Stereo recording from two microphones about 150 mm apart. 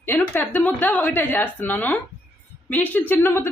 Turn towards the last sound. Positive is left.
turn(degrees=15)  # may be behind; listen again after turning